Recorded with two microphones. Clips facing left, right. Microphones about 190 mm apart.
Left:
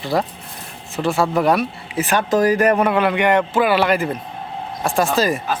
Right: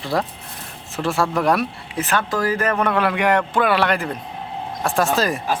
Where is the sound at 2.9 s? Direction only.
Centre (ahead or behind).